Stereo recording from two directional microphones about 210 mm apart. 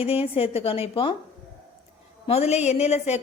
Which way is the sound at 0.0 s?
30° left (ahead or behind).